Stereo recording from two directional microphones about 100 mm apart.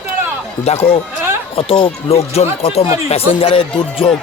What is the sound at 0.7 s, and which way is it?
Speech, 80° left.